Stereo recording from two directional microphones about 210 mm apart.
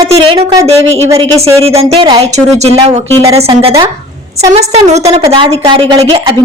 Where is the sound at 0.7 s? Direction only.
30° right (ahead or behind).